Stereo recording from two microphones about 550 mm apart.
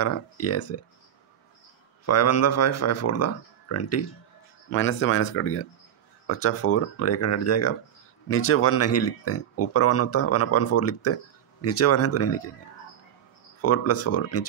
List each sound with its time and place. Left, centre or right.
0.0 s speech: left
2.0 s speech: left
13.6 s speech: left